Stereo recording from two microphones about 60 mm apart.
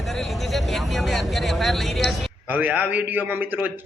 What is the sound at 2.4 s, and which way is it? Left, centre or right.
A man's voice, right.